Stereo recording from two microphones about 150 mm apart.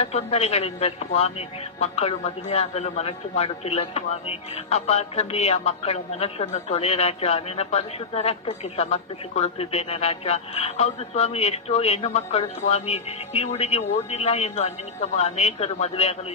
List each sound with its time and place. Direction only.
0.0 s a man's voice: 45° left (ahead or behind)